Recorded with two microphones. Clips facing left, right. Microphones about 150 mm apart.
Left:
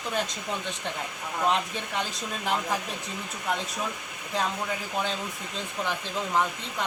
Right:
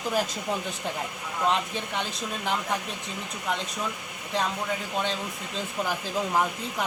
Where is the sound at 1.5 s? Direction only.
Centre (ahead or behind).